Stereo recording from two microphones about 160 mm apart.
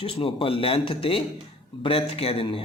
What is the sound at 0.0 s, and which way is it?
Speech, 35° left (ahead or behind).